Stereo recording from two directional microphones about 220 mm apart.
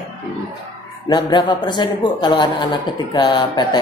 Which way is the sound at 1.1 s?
20° left (ahead or behind).